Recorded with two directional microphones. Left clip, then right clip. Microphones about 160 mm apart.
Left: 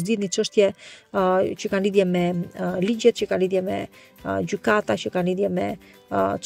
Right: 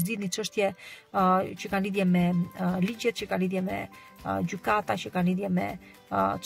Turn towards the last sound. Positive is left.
turn(degrees=35)  # may be behind; listen again after turning